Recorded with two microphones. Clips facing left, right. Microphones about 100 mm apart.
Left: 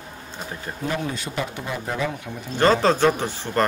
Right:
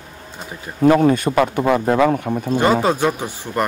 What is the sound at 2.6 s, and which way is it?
Speech, 10° right (ahead or behind).